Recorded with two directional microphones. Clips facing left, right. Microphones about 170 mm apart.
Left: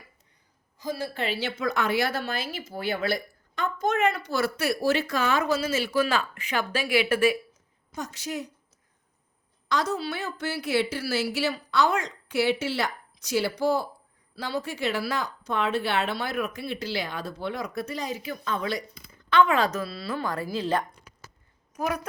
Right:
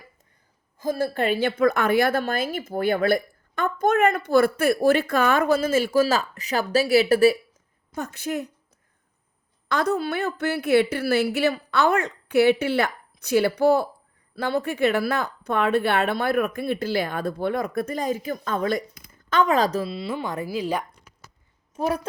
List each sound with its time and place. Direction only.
0.8 s a woman's voice: 50° right (ahead or behind)
7.9 s a woman's voice: 55° right (ahead or behind)
9.6 s a woman's voice: 60° right (ahead or behind); by 19.9 s 35° right (ahead or behind)
19.9 s speech: 20° right (ahead or behind)
21.8 s a woman's voice: 30° right (ahead or behind)